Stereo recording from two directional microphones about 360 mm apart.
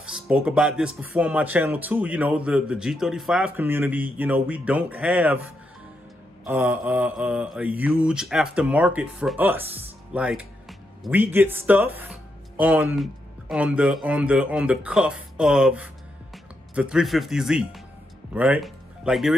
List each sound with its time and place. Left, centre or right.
0.0 s speech: centre